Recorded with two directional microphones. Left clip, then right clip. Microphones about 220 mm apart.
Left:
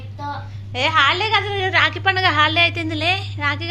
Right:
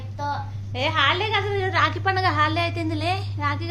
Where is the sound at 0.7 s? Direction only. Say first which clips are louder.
Left 5 dB; 15° left (ahead or behind).